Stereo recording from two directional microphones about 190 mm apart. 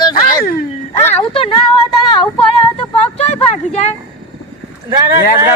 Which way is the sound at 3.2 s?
35° left (ahead or behind).